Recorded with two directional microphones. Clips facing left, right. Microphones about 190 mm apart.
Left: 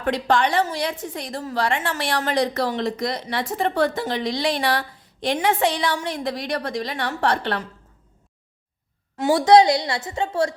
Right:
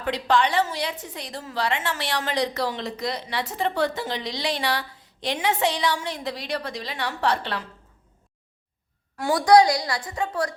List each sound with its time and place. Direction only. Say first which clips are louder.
0.0 s a woman's voice: left 2 dB; 50° left (ahead or behind)
9.1 s a woman's voice: left 2 dB; 20° left (ahead or behind)